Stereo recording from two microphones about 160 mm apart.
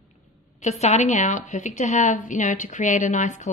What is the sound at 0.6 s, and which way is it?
Speech, 45° left (ahead or behind).